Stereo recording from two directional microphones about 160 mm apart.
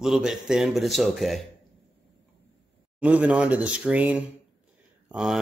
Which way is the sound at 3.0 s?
10° right (ahead or behind).